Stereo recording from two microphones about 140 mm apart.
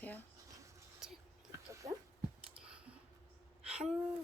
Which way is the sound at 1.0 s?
5° right (ahead or behind).